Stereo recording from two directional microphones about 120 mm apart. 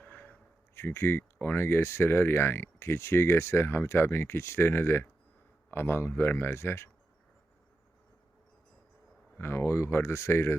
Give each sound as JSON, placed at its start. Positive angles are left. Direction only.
{"t": 0.0, "sound": "speech", "side_deg": 15}
{"t": 9.4, "sound": "speech", "side_deg": 20}